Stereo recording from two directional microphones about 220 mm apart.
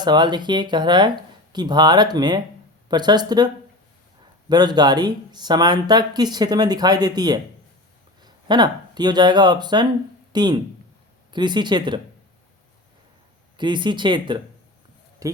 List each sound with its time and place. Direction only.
0.0 s speech: 20° right (ahead or behind)
13.6 s speech: 20° right (ahead or behind)